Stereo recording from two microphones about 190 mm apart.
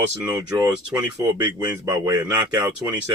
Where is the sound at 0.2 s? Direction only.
10° right (ahead or behind).